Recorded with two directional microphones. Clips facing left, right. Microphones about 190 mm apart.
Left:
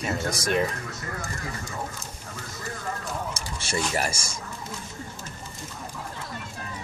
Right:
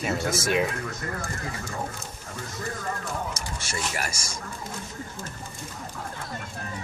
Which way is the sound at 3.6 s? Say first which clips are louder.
Left 6 dB; 30° left (ahead or behind).